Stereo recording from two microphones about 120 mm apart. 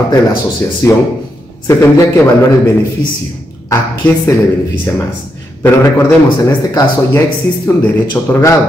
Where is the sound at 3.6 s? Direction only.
20° left (ahead or behind).